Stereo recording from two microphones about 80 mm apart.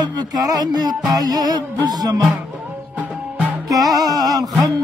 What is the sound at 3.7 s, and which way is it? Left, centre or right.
Music, right.